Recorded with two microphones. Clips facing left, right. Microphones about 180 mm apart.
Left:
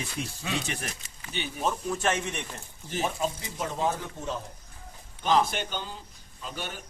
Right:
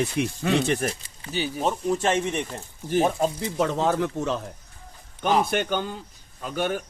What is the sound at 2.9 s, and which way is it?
Speech, 50° right (ahead or behind).